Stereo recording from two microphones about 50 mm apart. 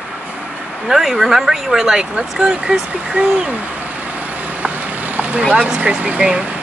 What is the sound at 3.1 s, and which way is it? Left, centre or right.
Speech, right.